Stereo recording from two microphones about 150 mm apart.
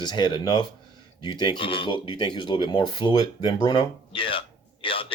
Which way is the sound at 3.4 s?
30° left (ahead or behind).